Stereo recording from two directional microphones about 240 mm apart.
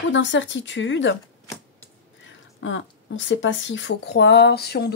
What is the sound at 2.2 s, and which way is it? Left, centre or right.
Speech, left.